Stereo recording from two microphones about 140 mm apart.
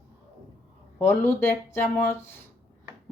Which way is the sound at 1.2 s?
15° left (ahead or behind).